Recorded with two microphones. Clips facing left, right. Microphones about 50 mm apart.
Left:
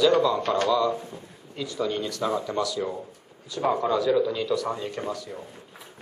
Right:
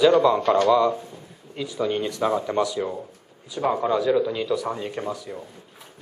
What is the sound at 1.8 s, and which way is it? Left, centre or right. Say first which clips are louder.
Speech: right 4 dB; right.